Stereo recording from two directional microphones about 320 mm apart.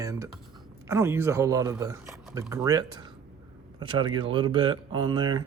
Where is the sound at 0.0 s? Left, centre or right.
Centre.